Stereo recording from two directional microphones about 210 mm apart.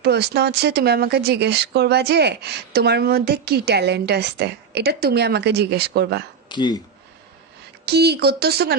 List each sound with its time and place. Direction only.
0.0 s speech: 50° right (ahead or behind)
6.5 s speech: 20° left (ahead or behind)
7.9 s speech: 50° right (ahead or behind)